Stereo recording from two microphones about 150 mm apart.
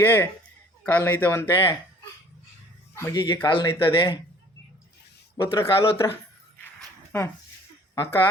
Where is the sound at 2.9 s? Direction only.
15° left (ahead or behind).